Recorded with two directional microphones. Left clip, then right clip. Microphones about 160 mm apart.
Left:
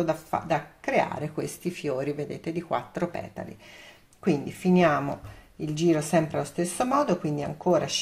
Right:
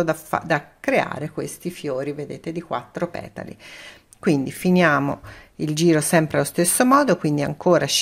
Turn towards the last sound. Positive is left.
turn(degrees=-60)  # may be behind; listen again after turning